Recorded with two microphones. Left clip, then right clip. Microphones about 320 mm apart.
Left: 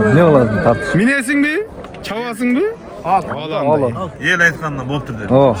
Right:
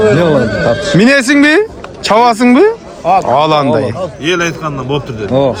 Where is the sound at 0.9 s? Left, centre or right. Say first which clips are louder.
Right 7 dB; centre.